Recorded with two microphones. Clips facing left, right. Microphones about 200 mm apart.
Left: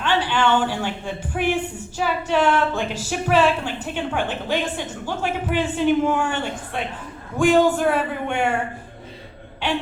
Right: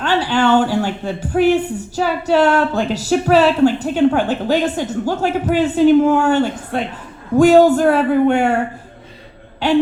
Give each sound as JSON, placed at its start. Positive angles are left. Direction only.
{"t": 0.0, "sound": "a woman's voice", "side_deg": -40}